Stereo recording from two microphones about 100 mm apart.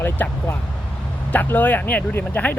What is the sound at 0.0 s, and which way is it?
Speech, 25° left (ahead or behind).